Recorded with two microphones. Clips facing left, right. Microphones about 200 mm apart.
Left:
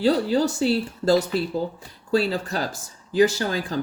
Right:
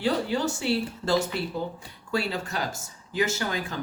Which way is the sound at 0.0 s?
35° left (ahead or behind).